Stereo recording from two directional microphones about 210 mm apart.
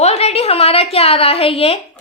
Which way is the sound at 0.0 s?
30° left (ahead or behind).